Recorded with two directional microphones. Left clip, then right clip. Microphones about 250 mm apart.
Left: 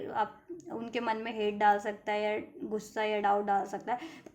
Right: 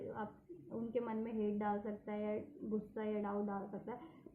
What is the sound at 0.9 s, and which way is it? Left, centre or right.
A woman's voice, left.